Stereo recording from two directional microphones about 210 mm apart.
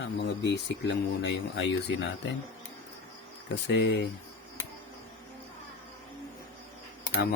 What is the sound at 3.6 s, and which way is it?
Speech, 55° left (ahead or behind).